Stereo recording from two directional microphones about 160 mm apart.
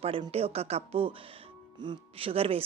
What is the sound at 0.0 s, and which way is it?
Speech, 35° right (ahead or behind).